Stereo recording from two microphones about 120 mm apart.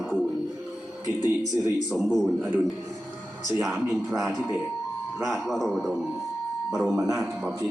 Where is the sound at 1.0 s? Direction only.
30° left (ahead or behind).